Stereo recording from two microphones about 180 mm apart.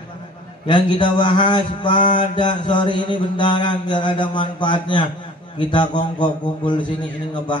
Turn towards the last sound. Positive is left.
turn(degrees=25)  # may be behind; listen again after turning